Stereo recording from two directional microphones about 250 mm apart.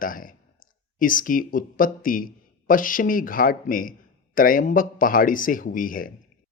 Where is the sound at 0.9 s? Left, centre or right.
Left.